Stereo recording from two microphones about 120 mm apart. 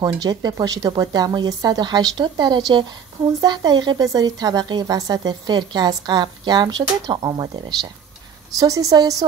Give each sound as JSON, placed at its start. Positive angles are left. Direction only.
{"t": 0.0, "sound": "a woman's voice", "side_deg": -35}